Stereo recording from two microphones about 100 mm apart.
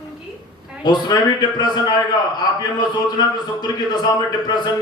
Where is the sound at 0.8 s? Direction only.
45° left (ahead or behind).